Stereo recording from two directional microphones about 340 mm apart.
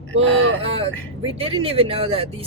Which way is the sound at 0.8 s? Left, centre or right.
Centre.